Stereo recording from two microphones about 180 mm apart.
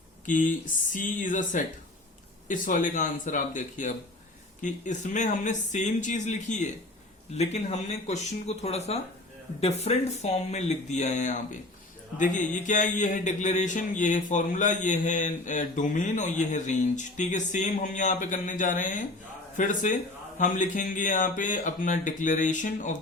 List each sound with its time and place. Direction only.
0.3 s speech: 45° left (ahead or behind)